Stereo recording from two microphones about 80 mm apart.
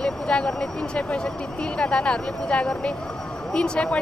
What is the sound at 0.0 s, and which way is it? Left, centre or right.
Speech, centre.